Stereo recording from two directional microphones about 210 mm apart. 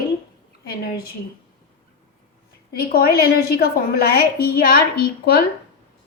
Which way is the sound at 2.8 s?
45° left (ahead or behind).